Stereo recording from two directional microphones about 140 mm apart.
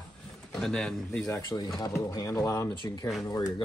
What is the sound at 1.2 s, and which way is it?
Speech, 25° left (ahead or behind).